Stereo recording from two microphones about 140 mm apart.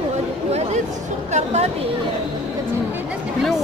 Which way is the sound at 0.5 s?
50° right (ahead or behind).